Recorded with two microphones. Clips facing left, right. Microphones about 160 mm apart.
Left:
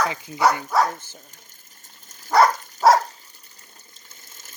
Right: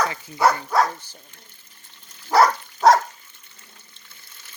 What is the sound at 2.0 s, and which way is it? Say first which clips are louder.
Dog: even; 45° left (ahead or behind).